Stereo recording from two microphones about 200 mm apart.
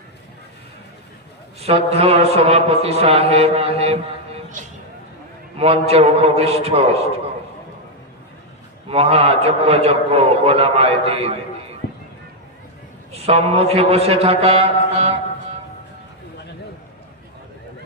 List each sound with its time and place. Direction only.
1.6 s speech: 30° right (ahead or behind)
8.9 s speech: 30° right (ahead or behind)
13.1 s speech: 30° right (ahead or behind)